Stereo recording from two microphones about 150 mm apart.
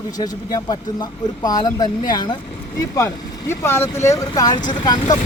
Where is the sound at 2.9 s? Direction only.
15° left (ahead or behind).